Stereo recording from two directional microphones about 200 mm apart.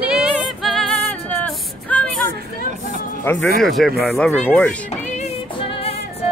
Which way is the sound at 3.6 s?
Centre (ahead or behind).